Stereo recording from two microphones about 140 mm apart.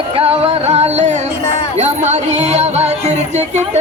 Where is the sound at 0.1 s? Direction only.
45° right (ahead or behind).